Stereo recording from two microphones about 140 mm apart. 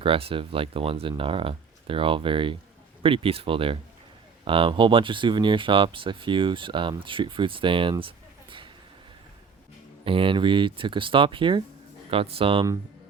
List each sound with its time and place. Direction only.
0.0 s speech: 40° right (ahead or behind)
10.0 s speech: 40° right (ahead or behind)